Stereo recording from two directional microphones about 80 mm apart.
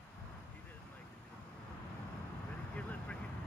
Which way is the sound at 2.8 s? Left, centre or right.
Centre.